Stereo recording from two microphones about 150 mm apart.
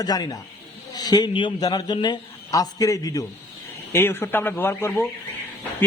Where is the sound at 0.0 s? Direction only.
25° left (ahead or behind).